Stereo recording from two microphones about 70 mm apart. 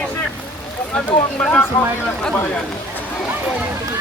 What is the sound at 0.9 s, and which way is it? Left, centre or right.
Speech, centre.